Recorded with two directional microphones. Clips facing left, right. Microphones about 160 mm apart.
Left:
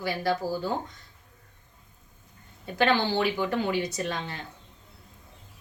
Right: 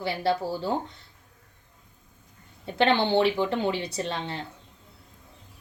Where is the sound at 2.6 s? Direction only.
25° right (ahead or behind).